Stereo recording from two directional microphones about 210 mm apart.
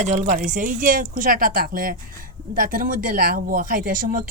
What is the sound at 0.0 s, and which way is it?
Speech, 35° right (ahead or behind).